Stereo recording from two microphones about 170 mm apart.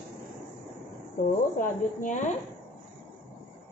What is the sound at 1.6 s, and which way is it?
Speech, 50° left (ahead or behind).